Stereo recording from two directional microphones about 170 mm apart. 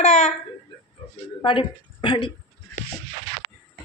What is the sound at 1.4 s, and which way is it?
Speech, 30° left (ahead or behind).